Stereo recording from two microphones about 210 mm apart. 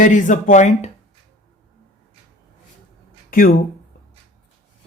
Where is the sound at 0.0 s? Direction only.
40° left (ahead or behind).